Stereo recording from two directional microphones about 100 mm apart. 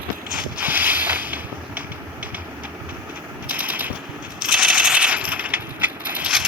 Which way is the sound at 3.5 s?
15° right (ahead or behind).